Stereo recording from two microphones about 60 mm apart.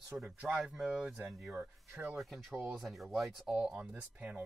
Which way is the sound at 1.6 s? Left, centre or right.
Right.